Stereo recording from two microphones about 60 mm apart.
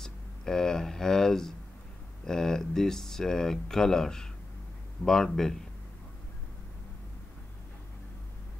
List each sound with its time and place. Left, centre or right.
0.0 s speech: centre